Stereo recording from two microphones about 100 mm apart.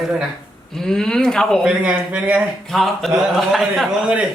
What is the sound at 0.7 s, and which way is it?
Speech, 5° left (ahead or behind).